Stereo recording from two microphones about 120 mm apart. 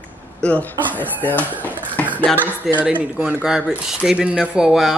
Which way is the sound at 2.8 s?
10° right (ahead or behind).